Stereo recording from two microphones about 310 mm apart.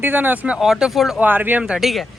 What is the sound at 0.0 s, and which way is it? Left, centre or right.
Speech, centre.